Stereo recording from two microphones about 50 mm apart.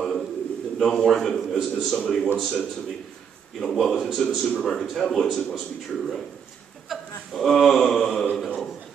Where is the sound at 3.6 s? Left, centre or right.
Centre.